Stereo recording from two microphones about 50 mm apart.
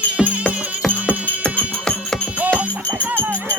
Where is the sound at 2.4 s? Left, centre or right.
Right.